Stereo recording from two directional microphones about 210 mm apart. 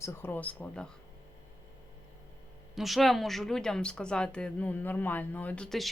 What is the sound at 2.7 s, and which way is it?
A woman's voice, centre (ahead or behind).